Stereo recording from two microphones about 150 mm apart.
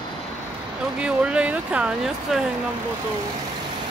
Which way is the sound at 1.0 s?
5° right (ahead or behind).